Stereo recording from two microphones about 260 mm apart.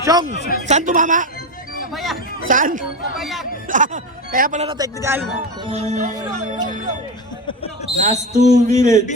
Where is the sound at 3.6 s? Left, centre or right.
Right.